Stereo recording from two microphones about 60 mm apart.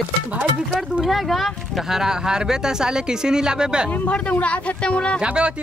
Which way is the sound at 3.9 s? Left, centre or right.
Left.